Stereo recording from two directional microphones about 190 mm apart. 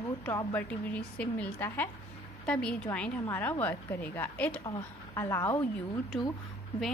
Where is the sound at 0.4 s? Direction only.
10° left (ahead or behind).